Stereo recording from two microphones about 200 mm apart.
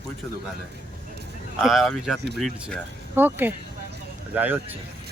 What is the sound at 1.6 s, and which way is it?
Speech, centre (ahead or behind).